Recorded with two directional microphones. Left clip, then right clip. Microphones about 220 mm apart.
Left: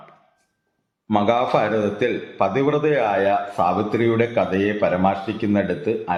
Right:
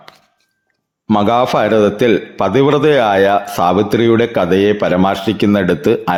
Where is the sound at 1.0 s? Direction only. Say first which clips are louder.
Right 6 dB; 50° right (ahead or behind).